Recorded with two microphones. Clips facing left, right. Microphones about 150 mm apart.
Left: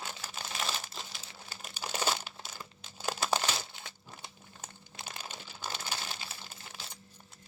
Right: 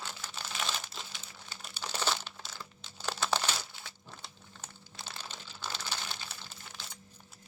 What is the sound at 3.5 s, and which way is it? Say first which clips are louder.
Crumpling: left 1 dB; 20° left (ahead or behind).